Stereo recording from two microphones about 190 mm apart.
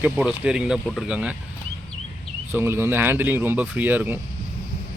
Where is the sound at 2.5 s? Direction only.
10° right (ahead or behind).